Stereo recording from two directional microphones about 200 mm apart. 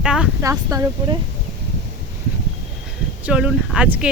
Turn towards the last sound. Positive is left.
turn(degrees=-5)  # may be behind; listen again after turning